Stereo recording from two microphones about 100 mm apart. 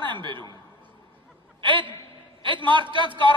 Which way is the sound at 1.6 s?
55° right (ahead or behind).